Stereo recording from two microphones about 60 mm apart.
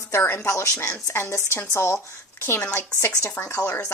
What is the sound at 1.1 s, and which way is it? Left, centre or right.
Speech, left.